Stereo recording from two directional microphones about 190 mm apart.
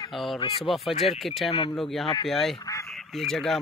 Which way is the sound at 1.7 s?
Centre (ahead or behind).